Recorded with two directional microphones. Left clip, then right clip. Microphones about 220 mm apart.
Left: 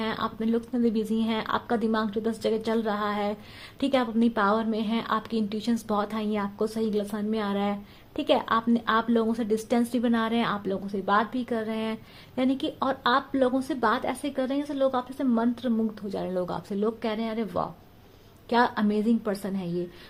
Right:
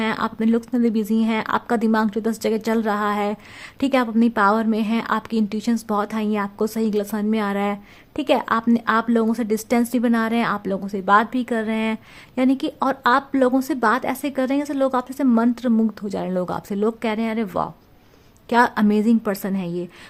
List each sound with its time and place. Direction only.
0.0 s a woman's voice: 30° right (ahead or behind)